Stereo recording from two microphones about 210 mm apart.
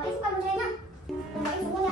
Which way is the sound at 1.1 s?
Centre (ahead or behind).